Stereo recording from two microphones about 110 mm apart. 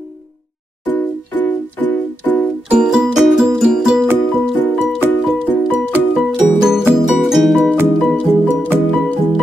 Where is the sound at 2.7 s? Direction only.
5° right (ahead or behind).